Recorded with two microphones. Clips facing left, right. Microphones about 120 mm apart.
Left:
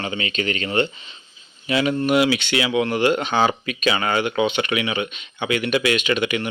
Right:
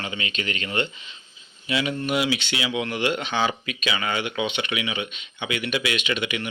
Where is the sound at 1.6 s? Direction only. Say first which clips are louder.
Left 6 dB; 50° left (ahead or behind).